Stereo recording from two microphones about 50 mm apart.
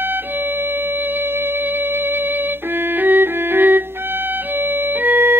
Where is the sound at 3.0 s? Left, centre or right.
Right.